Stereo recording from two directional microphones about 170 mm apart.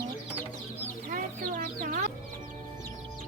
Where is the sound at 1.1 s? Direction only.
50° right (ahead or behind).